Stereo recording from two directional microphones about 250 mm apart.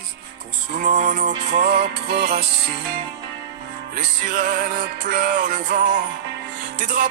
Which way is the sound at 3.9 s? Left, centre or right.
Right.